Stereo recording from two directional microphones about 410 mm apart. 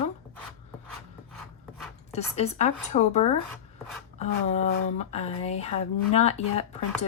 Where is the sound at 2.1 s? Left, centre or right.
Centre.